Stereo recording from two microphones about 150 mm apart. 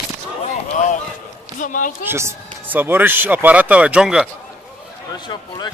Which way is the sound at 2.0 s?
15° right (ahead or behind).